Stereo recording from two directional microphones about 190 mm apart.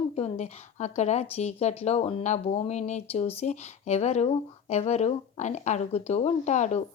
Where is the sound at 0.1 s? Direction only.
35° left (ahead or behind).